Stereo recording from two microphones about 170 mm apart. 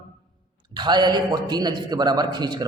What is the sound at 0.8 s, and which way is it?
A man's voice, 25° right (ahead or behind).